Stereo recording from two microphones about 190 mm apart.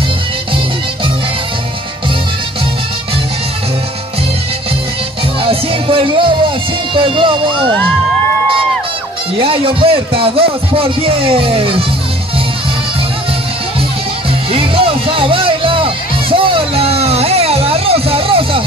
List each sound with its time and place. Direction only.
5.4 s music: 30° right (ahead or behind)
6.9 s a sound: 25° right (ahead or behind)
9.4 s a man's voice: 30° right (ahead or behind)
14.5 s music: 30° right (ahead or behind)